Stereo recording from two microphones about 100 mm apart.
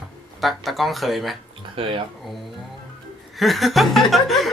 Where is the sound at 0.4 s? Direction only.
Centre (ahead or behind).